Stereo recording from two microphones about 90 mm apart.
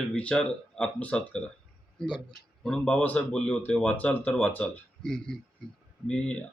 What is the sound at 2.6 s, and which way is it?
A man's voice, 10° left (ahead or behind).